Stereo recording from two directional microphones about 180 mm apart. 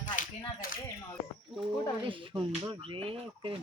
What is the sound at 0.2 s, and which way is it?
Speech, 50° left (ahead or behind).